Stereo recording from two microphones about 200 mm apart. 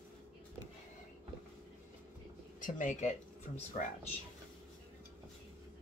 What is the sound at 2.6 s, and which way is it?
Speech, 40° left (ahead or behind).